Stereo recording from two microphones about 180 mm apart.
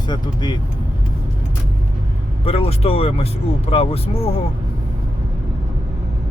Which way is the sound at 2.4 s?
35° left (ahead or behind).